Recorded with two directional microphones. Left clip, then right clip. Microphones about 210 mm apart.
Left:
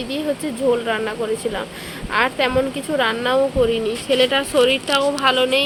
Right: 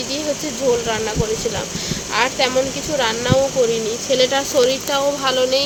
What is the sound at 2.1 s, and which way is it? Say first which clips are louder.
Speech: even; 10° left (ahead or behind).